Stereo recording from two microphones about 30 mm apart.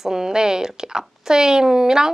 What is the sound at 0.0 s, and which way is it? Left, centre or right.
A woman's voice, centre.